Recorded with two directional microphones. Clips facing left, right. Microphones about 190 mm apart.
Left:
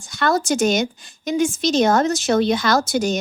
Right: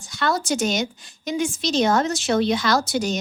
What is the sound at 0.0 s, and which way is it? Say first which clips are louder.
A woman's voice: left 4 dB; 50° left (ahead or behind).